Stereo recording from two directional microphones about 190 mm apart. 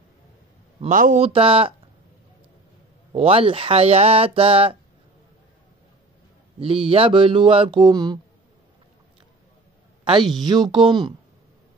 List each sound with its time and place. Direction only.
0.7 s a man's voice: 40° right (ahead or behind)
1.2 s speech: 30° right (ahead or behind)
3.1 s speech: 30° right (ahead or behind)
6.6 s speech: 30° right (ahead or behind)
10.4 s speech: 20° right (ahead or behind)